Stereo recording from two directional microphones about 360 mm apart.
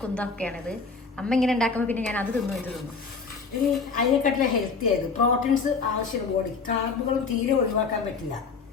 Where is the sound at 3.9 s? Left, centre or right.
Left.